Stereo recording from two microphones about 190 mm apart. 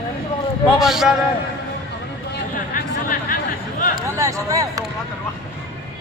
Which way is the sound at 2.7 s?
45° left (ahead or behind).